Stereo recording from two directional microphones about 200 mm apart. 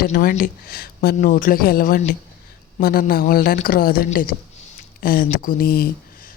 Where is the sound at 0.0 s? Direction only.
45° left (ahead or behind).